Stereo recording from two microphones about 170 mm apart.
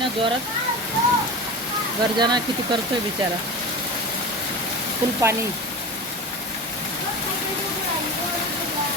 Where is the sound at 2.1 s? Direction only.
25° right (ahead or behind).